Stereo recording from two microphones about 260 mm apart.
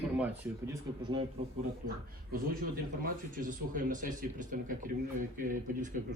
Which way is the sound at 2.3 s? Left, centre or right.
Right.